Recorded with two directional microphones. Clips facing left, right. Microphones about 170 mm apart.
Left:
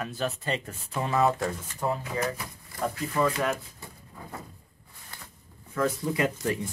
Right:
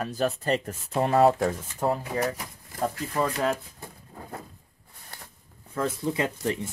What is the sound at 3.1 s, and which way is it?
Speech, 30° right (ahead or behind).